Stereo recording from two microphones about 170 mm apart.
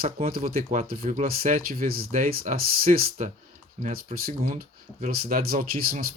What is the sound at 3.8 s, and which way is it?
Speech, 40° right (ahead or behind).